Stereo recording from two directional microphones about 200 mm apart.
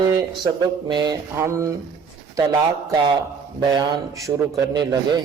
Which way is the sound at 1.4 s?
15° right (ahead or behind).